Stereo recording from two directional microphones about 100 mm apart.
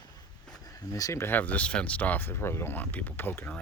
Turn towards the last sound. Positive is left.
turn(degrees=20)  # may be behind; listen again after turning